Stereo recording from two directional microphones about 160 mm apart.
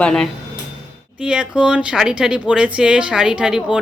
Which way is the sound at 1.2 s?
5° right (ahead or behind).